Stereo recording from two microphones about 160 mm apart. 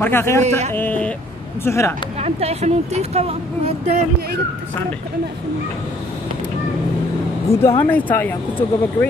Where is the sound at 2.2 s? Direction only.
45° right (ahead or behind).